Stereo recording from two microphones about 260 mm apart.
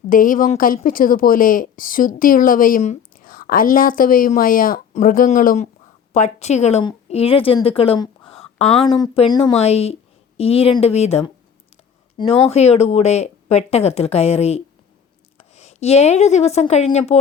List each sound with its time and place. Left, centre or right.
0.1 s a woman's voice: left